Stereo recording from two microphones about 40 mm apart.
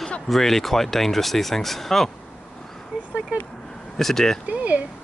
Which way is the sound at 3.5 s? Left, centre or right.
Centre.